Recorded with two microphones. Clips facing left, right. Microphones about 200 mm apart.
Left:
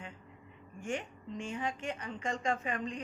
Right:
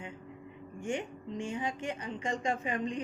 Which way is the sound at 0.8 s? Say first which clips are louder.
Right 3 dB; 15° right (ahead or behind).